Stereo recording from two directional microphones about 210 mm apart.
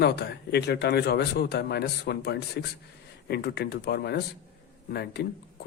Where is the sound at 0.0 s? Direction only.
50° left (ahead or behind).